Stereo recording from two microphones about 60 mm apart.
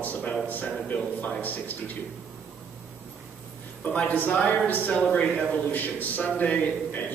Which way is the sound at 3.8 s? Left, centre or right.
Left.